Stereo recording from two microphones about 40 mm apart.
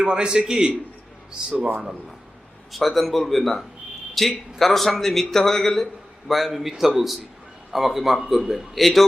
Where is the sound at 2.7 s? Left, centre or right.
Centre.